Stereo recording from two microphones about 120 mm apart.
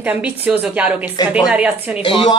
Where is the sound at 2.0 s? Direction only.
45° left (ahead or behind).